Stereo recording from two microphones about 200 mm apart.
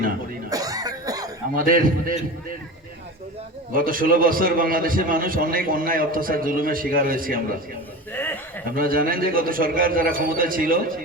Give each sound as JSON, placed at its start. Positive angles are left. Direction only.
{"t": 0.5, "sound": "cough", "side_deg": -20}
{"t": 1.5, "sound": "a man's voice", "side_deg": -45}
{"t": 3.7, "sound": "a man's voice", "side_deg": -45}
{"t": 8.1, "sound": "a man's voice", "side_deg": 10}
{"t": 8.6, "sound": "a man's voice", "side_deg": -45}